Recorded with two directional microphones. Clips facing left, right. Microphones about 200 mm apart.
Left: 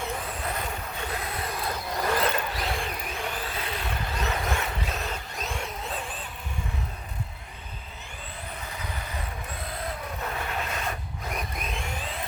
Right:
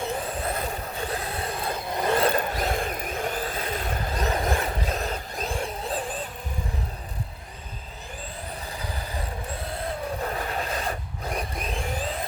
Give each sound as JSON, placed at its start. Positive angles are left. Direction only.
{"t": 0.3, "sound": "vehicle", "side_deg": -35}
{"t": 2.3, "sound": "vehicle", "side_deg": -45}
{"t": 8.7, "sound": "vehicle", "side_deg": -35}
{"t": 10.2, "sound": "rub", "side_deg": -35}